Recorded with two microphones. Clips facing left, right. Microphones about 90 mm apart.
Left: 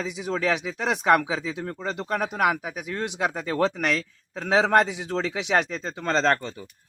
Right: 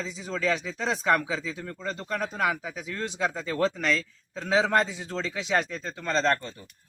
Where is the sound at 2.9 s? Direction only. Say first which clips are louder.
Left 2 dB; 15° left (ahead or behind).